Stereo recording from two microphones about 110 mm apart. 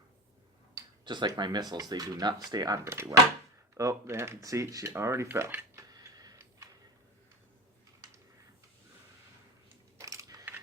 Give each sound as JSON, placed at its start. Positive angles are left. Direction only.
{"t": 1.0, "sound": "speech", "side_deg": -45}
{"t": 10.0, "sound": "coin", "side_deg": -30}